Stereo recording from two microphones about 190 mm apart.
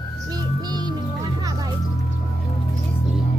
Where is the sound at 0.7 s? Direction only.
20° right (ahead or behind).